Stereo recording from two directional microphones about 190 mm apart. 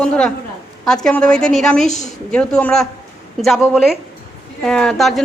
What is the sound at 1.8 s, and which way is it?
Speech, 40° left (ahead or behind).